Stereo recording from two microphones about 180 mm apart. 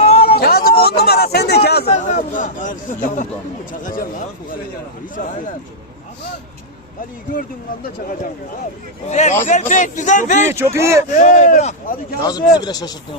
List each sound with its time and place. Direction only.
0.0 s a sound: 35° left (ahead or behind)
0.3 s a sound: 60° left (ahead or behind)
1.0 s speech: 60° left (ahead or behind)
1.9 s a man's voice: 45° left (ahead or behind)
3.8 s a man's voice: 50° left (ahead or behind)
9.0 s a man's voice: 40° left (ahead or behind)
10.5 s speech: 15° right (ahead or behind)
11.2 s a man's voice: 45° left (ahead or behind)
12.2 s speech: 20° left (ahead or behind)